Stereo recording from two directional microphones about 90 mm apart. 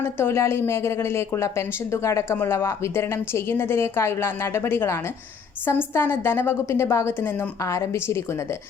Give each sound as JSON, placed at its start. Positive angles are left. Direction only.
{"t": 0.0, "sound": "speech", "side_deg": 30}
{"t": 7.6, "sound": "a woman's voice", "side_deg": 35}